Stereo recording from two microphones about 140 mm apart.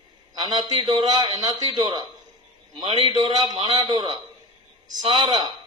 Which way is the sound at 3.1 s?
25° right (ahead or behind).